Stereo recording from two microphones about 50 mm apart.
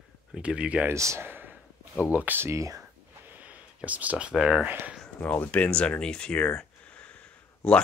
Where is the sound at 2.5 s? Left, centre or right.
Right.